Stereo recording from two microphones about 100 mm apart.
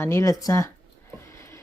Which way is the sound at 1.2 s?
25° left (ahead or behind).